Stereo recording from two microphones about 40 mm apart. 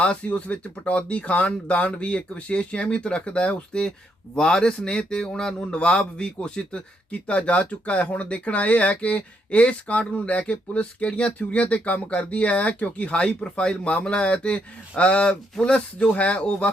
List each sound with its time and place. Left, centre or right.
0.0 s a man's voice: left